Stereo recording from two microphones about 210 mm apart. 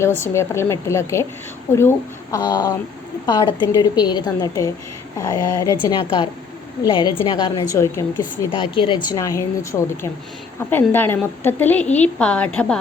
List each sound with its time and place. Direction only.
0.2 s a woman's voice: 15° left (ahead or behind)